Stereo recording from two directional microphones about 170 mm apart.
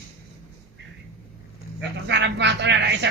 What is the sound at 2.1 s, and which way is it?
Speech, 90° right.